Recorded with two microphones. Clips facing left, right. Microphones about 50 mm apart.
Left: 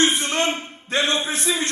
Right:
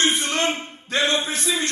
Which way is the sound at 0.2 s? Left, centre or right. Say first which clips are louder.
Left 1 dB; left.